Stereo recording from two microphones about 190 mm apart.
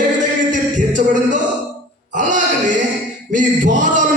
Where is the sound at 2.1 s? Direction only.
40° right (ahead or behind).